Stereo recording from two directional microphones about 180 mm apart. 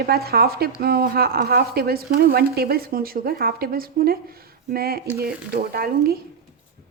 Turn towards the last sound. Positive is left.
turn(degrees=-55)  # may be behind; listen again after turning